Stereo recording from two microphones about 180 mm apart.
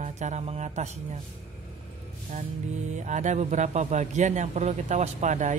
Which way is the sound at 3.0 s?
45° right (ahead or behind).